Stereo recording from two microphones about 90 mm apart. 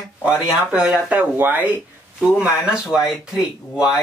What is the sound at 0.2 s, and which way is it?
Speech, 10° right (ahead or behind).